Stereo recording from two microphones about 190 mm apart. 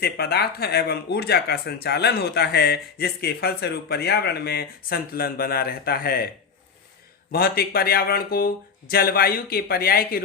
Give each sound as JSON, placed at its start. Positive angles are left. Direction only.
{"t": 0.0, "sound": "speech", "side_deg": 55}